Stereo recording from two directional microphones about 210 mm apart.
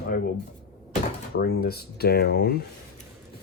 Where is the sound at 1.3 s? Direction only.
50° left (ahead or behind).